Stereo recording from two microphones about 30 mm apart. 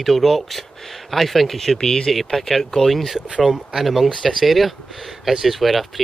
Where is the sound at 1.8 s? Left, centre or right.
Left.